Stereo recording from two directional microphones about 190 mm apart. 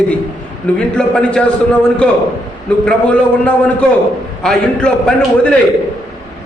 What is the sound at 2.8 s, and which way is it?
A man's voice, 5° left (ahead or behind).